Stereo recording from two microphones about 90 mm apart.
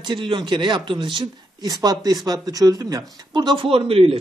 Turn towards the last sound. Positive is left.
turn(degrees=-90)